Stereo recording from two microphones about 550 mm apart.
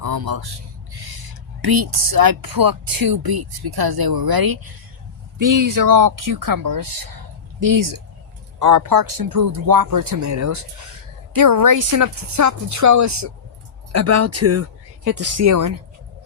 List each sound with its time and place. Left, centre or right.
0.0 s speech: right